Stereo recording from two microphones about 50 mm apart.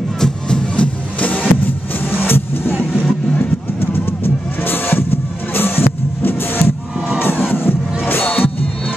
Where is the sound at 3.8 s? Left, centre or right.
Left.